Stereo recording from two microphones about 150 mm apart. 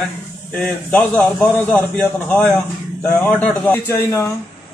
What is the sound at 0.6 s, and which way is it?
A man's voice, 10° left (ahead or behind).